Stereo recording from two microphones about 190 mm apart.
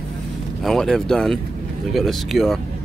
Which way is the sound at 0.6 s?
Centre (ahead or behind).